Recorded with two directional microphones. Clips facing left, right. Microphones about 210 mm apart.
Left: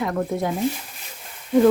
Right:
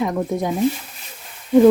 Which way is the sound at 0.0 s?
15° right (ahead or behind).